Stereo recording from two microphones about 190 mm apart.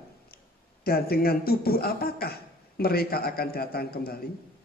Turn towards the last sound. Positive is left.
turn(degrees=55)  # may be behind; listen again after turning